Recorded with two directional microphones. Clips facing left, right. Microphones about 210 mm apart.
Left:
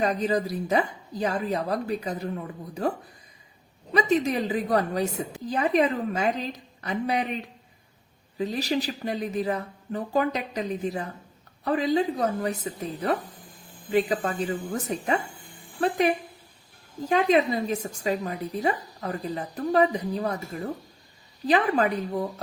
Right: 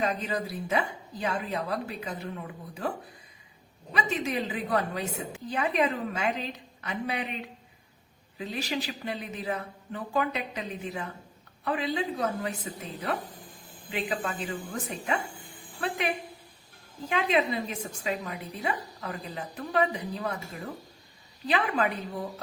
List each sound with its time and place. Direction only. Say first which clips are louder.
0.0 s a woman's voice: left 5 dB; 40° left (ahead or behind)
3.9 s a woman's voice: left 7 dB; 40° left (ahead or behind)
8.4 s a woman's voice: left 6 dB; 40° left (ahead or behind)
13.9 s a woman's voice: left 8 dB; 40° left (ahead or behind)
21.4 s a woman's voice: left 5 dB; 35° left (ahead or behind)